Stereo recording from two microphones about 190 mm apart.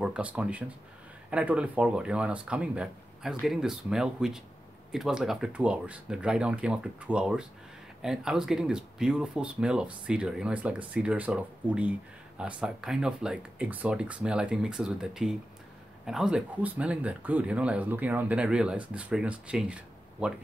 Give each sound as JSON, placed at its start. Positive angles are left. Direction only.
{"t": 0.0, "sound": "speech", "side_deg": -5}